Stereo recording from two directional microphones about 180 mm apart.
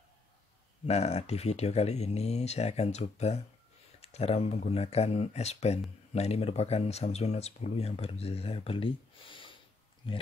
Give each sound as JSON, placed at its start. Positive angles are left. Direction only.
{"t": 0.8, "sound": "speech", "side_deg": 35}